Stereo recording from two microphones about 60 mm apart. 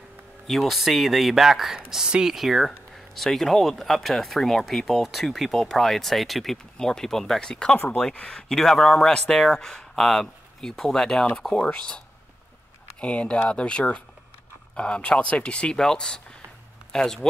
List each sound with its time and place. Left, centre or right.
0.5 s speech: centre
13.0 s speech: centre